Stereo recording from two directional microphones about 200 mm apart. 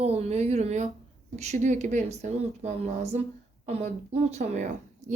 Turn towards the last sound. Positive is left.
turn(degrees=-35)  # may be behind; listen again after turning